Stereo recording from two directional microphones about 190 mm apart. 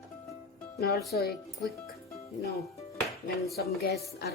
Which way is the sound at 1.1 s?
55° left (ahead or behind).